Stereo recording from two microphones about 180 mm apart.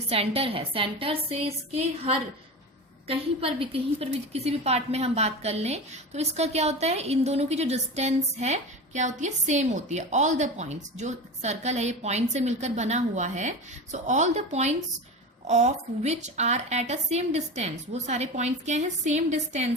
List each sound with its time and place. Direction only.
0.1 s a woman's voice: 30° right (ahead or behind)